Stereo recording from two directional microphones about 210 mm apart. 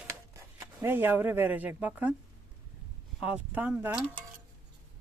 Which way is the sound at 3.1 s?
5° right (ahead or behind).